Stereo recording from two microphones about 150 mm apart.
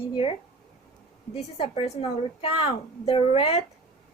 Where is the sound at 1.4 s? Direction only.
40° left (ahead or behind).